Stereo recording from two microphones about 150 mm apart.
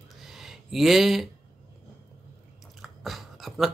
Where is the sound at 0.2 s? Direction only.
Centre (ahead or behind).